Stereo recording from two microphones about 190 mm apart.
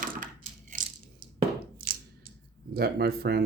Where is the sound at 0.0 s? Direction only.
45° right (ahead or behind).